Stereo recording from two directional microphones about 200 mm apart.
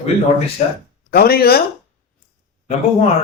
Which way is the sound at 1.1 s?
50° left (ahead or behind).